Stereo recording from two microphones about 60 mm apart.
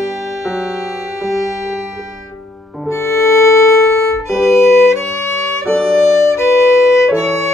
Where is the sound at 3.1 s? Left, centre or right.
Left.